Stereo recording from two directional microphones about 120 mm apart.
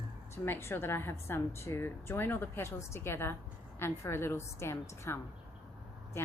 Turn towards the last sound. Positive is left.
turn(degrees=20)  # may be behind; listen again after turning